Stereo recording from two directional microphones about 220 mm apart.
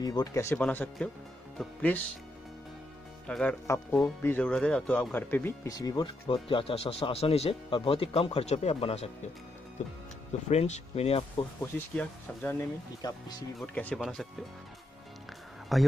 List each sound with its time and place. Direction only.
0.0 s speech: 15° left (ahead or behind)
3.3 s speech: 5° left (ahead or behind); by 11.4 s 25° left (ahead or behind)
11.6 s speech: 5° left (ahead or behind)
15.7 s speech: centre (ahead or behind)